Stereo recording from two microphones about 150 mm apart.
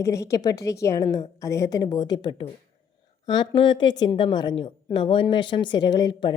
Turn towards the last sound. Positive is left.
turn(degrees=30)  # may be behind; listen again after turning